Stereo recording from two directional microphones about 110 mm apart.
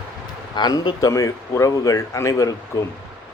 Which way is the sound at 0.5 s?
40° left (ahead or behind).